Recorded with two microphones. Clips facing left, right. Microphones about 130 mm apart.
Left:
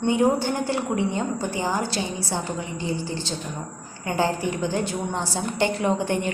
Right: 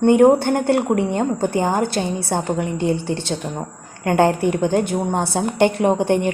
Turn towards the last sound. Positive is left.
turn(degrees=-55)  # may be behind; listen again after turning